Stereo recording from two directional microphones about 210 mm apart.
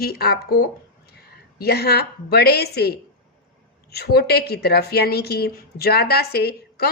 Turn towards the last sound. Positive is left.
turn(degrees=50)  # may be behind; listen again after turning